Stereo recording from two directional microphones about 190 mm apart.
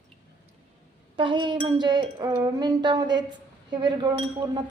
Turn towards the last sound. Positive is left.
turn(degrees=-20)  # may be behind; listen again after turning